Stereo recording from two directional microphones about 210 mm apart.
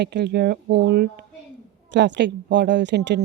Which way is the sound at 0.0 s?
55° right (ahead or behind).